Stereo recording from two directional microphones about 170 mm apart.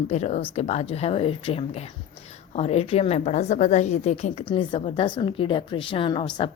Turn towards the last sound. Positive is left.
turn(degrees=30)  # may be behind; listen again after turning